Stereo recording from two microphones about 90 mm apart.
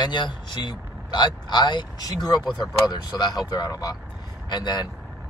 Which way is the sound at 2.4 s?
Centre (ahead or behind).